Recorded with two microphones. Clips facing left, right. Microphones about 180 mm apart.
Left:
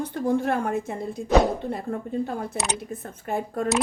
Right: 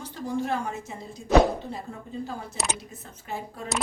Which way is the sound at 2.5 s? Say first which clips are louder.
Left 4 dB; 55° left (ahead or behind).